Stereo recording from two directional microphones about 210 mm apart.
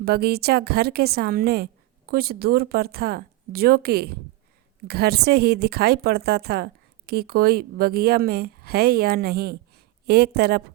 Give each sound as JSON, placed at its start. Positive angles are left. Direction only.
{"t": 0.0, "sound": "speech", "side_deg": -50}